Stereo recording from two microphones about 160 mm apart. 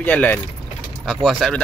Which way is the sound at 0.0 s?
10° left (ahead or behind).